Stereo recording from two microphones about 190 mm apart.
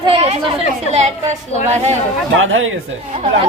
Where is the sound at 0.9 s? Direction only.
35° right (ahead or behind).